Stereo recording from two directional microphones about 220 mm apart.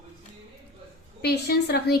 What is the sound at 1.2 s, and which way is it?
Speech, 45° left (ahead or behind).